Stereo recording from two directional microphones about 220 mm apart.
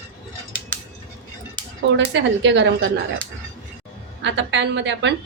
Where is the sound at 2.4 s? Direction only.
55° right (ahead or behind).